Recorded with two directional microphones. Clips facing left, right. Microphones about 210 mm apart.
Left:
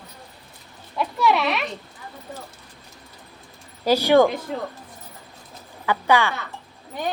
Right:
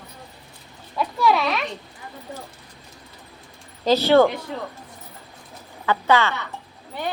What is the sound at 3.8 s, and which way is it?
Speech, 10° left (ahead or behind).